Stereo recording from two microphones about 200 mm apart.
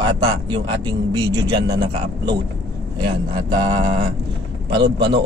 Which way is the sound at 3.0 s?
20° right (ahead or behind).